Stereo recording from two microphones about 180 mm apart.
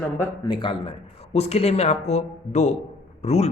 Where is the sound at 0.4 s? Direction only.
25° left (ahead or behind).